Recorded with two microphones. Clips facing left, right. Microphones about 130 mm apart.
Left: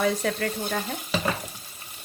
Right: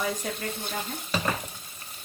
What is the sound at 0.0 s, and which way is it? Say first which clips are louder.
Speech: left 6 dB; 75° left (ahead or behind).